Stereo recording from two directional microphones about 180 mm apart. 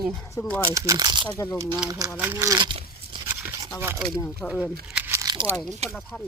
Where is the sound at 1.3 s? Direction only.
20° left (ahead or behind).